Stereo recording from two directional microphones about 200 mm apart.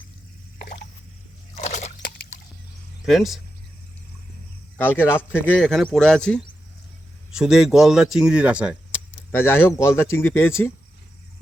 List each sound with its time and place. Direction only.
1.5 s a sound: 35° left (ahead or behind)
3.1 s speech: centre (ahead or behind)
4.9 s speech: 10° left (ahead or behind); by 8.8 s 5° right (ahead or behind)
9.3 s speech: 10° left (ahead or behind)